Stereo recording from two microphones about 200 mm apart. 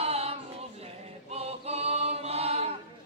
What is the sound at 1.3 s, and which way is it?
A capella, 30° right (ahead or behind).